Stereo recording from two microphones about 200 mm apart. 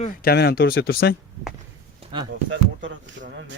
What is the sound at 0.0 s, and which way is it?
Speech, 45° left (ahead or behind).